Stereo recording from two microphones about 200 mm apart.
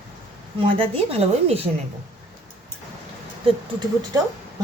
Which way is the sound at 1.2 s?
30° right (ahead or behind).